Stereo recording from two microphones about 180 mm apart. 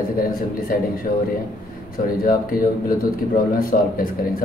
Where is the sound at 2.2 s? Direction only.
55° left (ahead or behind).